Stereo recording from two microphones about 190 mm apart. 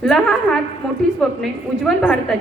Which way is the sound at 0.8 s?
5° left (ahead or behind).